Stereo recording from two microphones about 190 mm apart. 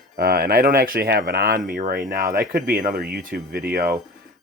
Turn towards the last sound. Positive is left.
turn(degrees=-50)  # may be behind; listen again after turning